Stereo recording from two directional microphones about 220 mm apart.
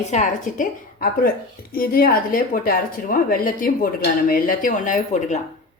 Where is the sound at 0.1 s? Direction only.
35° left (ahead or behind).